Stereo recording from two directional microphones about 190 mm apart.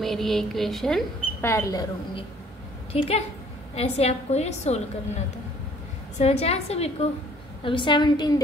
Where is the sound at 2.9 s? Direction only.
30° left (ahead or behind).